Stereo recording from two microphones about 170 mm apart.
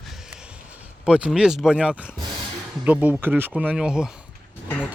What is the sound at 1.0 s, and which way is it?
Speech, 5° right (ahead or behind).